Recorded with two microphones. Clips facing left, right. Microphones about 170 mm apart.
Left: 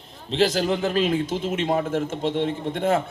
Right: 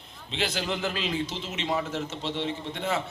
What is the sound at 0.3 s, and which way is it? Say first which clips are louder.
A man's voice: left 9 dB; 40° left (ahead or behind).